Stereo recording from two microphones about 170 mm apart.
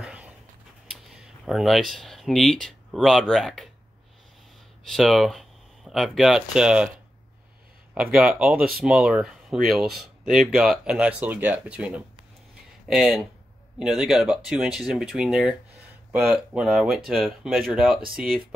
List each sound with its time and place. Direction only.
0.0 s a sound: 5° right (ahead or behind)
0.8 s speech: centre (ahead or behind)
4.8 s speech: centre (ahead or behind)
7.9 s speech: 5° right (ahead or behind)
8.5 s speech: 60° right (ahead or behind)
8.8 s speech: 5° right (ahead or behind)